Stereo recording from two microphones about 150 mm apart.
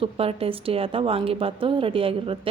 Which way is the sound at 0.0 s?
40° right (ahead or behind).